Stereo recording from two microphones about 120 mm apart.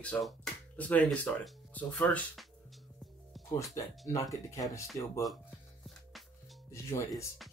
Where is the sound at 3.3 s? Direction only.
Centre (ahead or behind).